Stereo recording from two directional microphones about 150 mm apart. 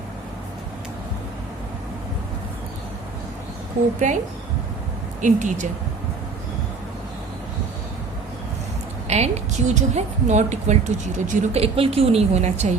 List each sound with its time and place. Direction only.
4.0 s speech: 55° right (ahead or behind)
5.2 s speech: 55° right (ahead or behind)
9.0 s a woman's voice: 45° right (ahead or behind)